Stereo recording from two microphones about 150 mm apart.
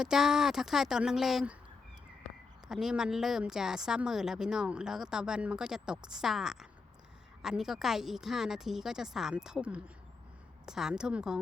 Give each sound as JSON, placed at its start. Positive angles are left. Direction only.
{"t": 0.0, "sound": "speech", "side_deg": -5}
{"t": 2.6, "sound": "speech", "side_deg": -5}